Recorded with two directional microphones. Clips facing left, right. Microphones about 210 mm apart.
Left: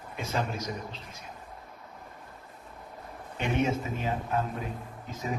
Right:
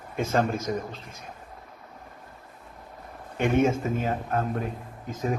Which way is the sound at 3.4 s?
50° right (ahead or behind).